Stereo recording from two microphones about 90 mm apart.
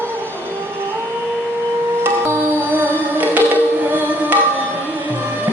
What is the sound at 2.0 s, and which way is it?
Music, 25° right (ahead or behind).